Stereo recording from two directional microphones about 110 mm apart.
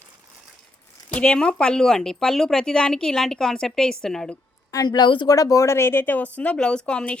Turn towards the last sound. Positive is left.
turn(degrees=10)  # may be behind; listen again after turning